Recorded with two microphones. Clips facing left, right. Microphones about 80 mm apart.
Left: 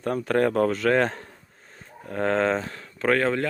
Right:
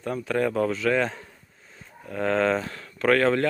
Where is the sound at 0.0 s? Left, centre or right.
Left.